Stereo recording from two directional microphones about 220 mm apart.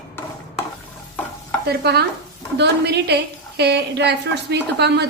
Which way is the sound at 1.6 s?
45° right (ahead or behind).